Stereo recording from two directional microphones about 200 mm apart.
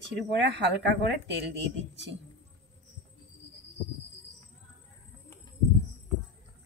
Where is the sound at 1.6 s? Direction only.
65° right (ahead or behind).